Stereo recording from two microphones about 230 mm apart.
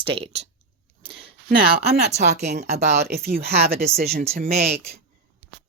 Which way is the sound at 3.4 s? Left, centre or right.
Right.